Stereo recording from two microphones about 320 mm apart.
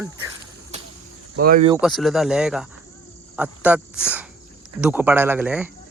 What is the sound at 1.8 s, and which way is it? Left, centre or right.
Speech, centre.